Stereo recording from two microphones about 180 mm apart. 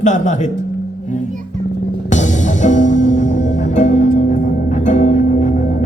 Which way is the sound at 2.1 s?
40° left (ahead or behind).